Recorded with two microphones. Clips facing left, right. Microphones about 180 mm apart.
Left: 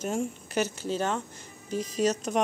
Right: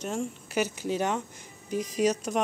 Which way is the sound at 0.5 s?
15° right (ahead or behind).